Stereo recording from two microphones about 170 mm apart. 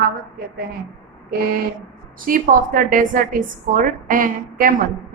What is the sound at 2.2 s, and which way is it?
A woman's voice, 55° right (ahead or behind).